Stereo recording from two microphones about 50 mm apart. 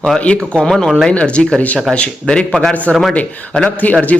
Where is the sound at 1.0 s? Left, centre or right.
Left.